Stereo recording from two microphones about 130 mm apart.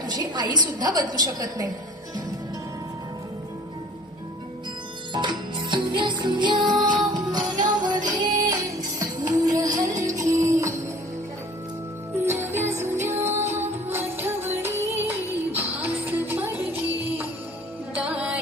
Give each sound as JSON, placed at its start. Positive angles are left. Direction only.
{"t": 0.0, "sound": "a woman's voice", "side_deg": -30}
{"t": 5.1, "sound": "music", "side_deg": -35}
{"t": 12.2, "sound": "music", "side_deg": -20}
{"t": 17.9, "sound": "music", "side_deg": -10}